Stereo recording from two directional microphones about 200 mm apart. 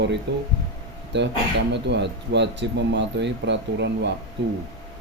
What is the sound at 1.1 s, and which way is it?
Speech, 60° right (ahead or behind).